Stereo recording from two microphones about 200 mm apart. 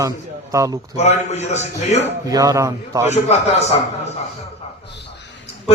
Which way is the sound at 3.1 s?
35° left (ahead or behind).